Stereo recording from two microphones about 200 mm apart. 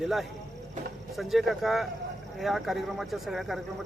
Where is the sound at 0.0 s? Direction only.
Centre (ahead or behind).